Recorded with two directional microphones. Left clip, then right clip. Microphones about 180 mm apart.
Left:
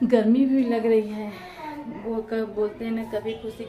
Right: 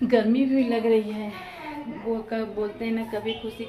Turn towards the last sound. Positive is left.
turn(degrees=10)  # may be behind; listen again after turning